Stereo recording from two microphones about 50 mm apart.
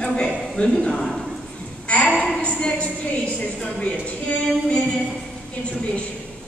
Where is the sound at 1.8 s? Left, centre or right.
Left.